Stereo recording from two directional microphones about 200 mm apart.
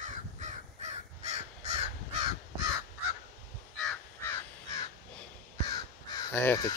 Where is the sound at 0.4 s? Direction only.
35° right (ahead or behind).